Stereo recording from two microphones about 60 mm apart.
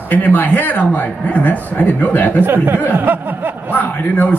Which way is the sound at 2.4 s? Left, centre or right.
Right.